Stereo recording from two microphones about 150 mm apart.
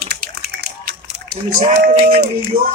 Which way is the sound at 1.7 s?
85° right.